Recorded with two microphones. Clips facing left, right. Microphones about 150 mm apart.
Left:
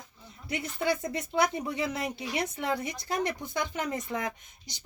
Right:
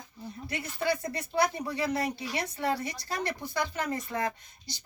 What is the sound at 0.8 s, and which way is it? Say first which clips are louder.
A woman's voice: left 1 dB; 20° left (ahead or behind).